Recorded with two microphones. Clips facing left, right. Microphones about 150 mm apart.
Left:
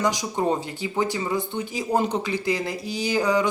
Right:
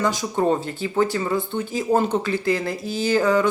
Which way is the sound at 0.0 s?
15° left (ahead or behind).